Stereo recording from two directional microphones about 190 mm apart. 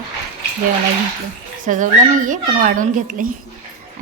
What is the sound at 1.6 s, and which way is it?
A woman's voice, 45° right (ahead or behind).